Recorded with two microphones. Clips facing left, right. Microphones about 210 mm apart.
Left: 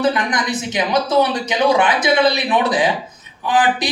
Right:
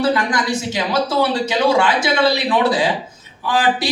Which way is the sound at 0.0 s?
20° left (ahead or behind).